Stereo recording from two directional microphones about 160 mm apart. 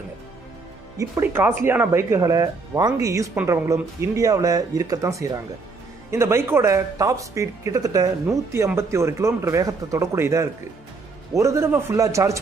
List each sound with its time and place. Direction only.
0.9 s speech: 15° right (ahead or behind)